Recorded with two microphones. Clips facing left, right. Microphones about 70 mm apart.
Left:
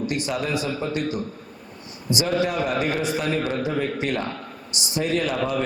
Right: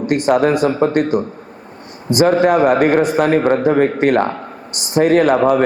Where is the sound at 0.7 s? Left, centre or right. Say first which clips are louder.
Right 11 dB; right.